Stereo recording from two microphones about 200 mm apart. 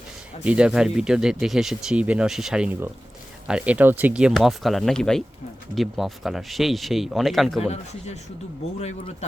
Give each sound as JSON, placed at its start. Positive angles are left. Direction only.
{"t": 0.4, "sound": "speech", "side_deg": -5}
{"t": 7.6, "sound": "a man's voice", "side_deg": 35}